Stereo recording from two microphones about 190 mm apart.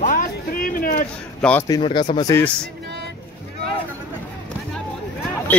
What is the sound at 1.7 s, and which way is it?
Speech, 25° left (ahead or behind).